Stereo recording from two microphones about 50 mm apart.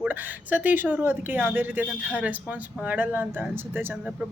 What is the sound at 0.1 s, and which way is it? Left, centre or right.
Speech, right.